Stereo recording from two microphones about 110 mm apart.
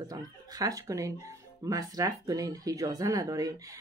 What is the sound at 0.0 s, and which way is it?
Speech, 30° right (ahead or behind).